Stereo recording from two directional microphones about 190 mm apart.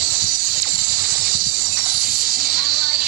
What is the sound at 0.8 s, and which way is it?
Hiss, 50° right (ahead or behind).